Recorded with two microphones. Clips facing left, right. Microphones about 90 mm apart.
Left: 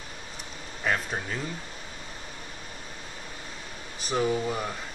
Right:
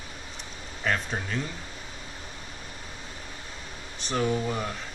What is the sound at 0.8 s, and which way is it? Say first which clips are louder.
Speech: even; 5° left (ahead or behind).